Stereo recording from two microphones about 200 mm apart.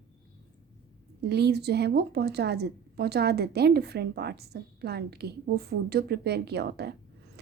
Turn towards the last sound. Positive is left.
turn(degrees=-55)  # may be behind; listen again after turning